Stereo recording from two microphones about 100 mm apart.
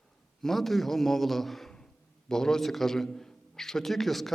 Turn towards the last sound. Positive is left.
turn(degrees=0)  # may be behind; listen again after turning